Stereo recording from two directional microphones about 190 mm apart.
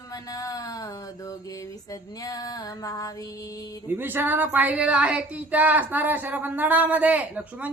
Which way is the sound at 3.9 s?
10° right (ahead or behind).